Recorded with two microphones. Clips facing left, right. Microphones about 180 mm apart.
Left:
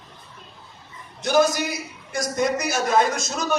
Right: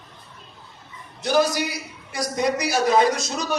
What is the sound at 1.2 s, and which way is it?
A man's voice, 45° left (ahead or behind).